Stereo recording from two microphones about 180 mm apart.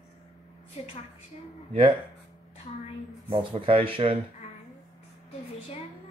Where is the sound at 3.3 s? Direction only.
30° right (ahead or behind).